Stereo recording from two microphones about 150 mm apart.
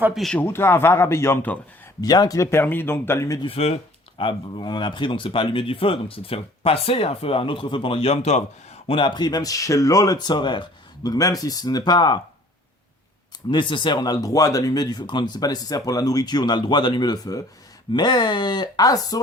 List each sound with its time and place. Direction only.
0.0 s speech: centre (ahead or behind)
0.3 s speech: 15° left (ahead or behind)
2.0 s speech: 25° left (ahead or behind)
3.4 s speech: 40° left (ahead or behind)
13.5 s speech: 30° left (ahead or behind)